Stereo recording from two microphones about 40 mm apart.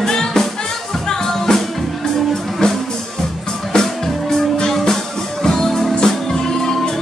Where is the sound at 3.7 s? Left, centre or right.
Centre.